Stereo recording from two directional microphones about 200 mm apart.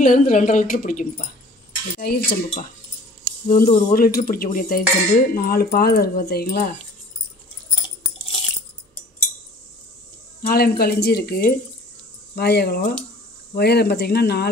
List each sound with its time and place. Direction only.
0.0 s speech: 40° left (ahead or behind)
2.0 s cutlery: 50° left (ahead or behind)
10.4 s cutlery: 50° left (ahead or behind)